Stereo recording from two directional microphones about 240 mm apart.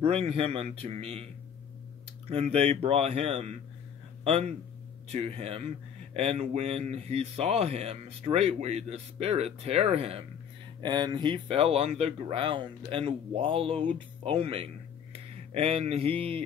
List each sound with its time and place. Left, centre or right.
0.0 s speech: right